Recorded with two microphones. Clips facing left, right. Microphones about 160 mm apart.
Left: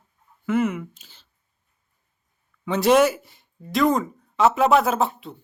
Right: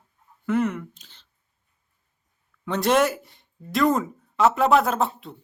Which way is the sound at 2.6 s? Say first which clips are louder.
Left 3 dB; centre (ahead or behind).